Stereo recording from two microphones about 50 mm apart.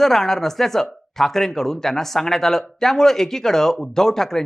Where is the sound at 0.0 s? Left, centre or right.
Centre.